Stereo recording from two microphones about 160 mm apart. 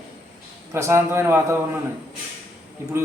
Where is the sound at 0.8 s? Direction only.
15° right (ahead or behind).